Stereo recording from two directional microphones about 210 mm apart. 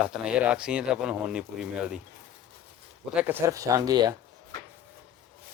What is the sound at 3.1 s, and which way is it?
Speech, 10° right (ahead or behind).